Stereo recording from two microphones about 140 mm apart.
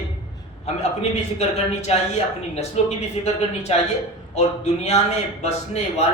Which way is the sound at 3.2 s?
40° left (ahead or behind).